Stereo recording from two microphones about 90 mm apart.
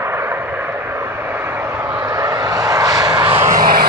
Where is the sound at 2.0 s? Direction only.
45° right (ahead or behind).